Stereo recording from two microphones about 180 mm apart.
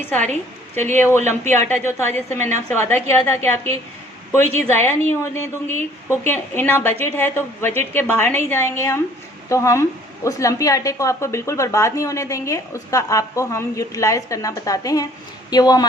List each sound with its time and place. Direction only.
0.0 s speech: 10° left (ahead or behind)
1.5 s speech: 10° left (ahead or behind)